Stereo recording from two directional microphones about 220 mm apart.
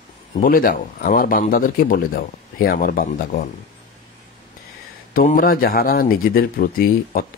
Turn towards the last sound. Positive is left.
turn(degrees=40)  # may be behind; listen again after turning